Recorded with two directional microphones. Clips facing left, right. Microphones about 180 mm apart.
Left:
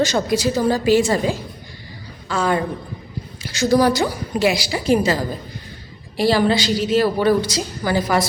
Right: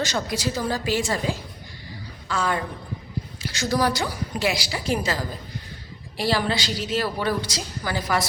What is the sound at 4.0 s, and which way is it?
A woman's voice, 20° left (ahead or behind).